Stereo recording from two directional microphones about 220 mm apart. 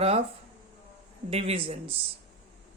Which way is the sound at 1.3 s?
25° right (ahead or behind).